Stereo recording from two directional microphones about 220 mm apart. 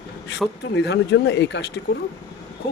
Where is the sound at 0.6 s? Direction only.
50° left (ahead or behind).